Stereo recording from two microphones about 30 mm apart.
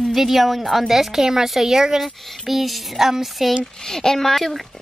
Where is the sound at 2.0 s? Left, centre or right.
Centre.